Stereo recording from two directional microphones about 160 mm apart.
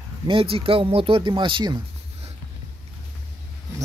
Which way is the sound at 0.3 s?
35° right (ahead or behind).